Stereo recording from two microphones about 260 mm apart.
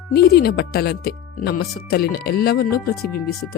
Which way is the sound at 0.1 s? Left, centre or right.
Left.